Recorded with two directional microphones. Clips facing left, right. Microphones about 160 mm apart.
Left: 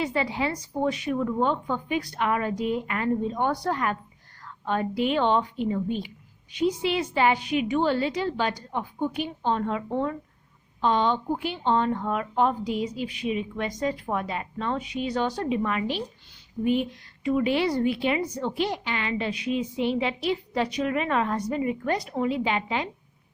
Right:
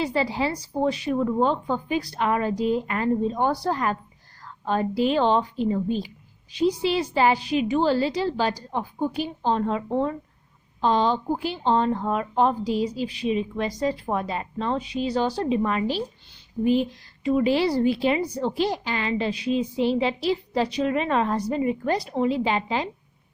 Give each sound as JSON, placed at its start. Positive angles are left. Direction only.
{"t": 0.0, "sound": "a woman's voice", "side_deg": -35}